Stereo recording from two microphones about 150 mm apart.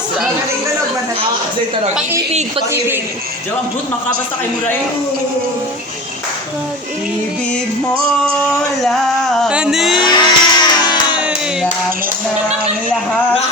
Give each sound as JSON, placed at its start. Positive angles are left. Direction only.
{"t": 2.7, "sound": "a man's voice", "side_deg": -15}
{"t": 8.2, "sound": "music", "side_deg": 0}
{"t": 10.1, "sound": "music", "side_deg": 30}